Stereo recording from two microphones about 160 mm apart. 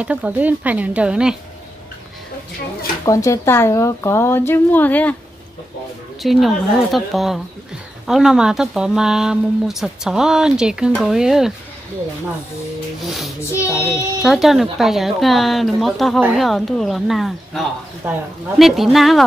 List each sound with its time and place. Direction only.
0.0 s speech: 10° right (ahead or behind)
3.1 s a woman's voice: 20° left (ahead or behind)
6.2 s speech: centre (ahead or behind)
13.0 s speech: centre (ahead or behind)
13.5 s a woman's voice: 15° left (ahead or behind)
14.2 s speech: centre (ahead or behind)
18.0 s speech: 15° right (ahead or behind)
18.6 s speech: centre (ahead or behind)